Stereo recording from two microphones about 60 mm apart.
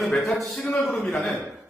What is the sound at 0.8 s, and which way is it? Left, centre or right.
Speech, centre.